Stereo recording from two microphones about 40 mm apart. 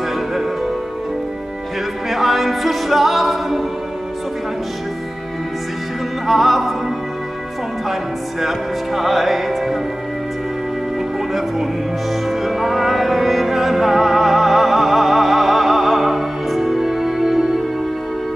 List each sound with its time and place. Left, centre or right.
2.0 s a capella: centre
6.2 s music: centre
7.9 s music: centre
11.3 s music: centre